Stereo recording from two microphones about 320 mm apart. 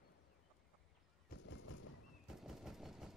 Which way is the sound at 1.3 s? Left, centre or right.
Left.